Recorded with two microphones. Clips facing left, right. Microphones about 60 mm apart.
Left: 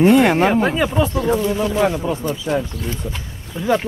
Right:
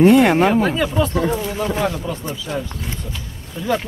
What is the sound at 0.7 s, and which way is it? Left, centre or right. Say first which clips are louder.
Speech: left 1 dB; centre.